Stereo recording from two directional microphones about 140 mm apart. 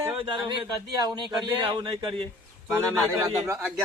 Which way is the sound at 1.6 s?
35° right (ahead or behind).